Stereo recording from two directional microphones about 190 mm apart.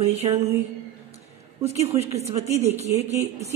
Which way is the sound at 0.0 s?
35° right (ahead or behind).